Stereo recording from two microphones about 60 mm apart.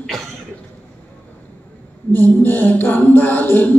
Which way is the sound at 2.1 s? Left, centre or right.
Left.